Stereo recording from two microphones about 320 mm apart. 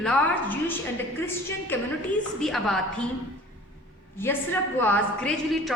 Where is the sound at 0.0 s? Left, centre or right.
Centre.